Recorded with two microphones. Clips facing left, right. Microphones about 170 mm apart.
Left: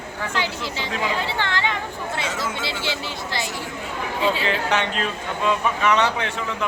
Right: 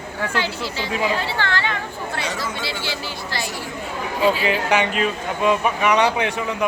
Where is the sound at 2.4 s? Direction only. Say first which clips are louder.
Even; 20° left (ahead or behind).